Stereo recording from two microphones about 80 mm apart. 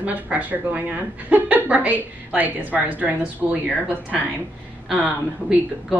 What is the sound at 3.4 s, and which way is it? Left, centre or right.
Speech, centre.